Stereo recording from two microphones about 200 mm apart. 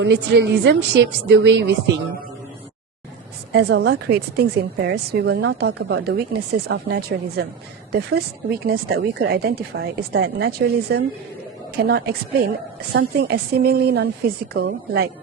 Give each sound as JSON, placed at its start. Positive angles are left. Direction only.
{"t": 0.0, "sound": "a woman's voice", "side_deg": -60}
{"t": 3.5, "sound": "a woman's voice", "side_deg": -55}
{"t": 8.6, "sound": "a woman's voice", "side_deg": -50}